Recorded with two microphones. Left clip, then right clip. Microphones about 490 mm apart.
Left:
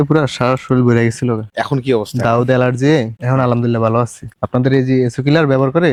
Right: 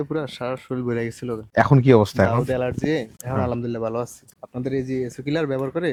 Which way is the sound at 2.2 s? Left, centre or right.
Left.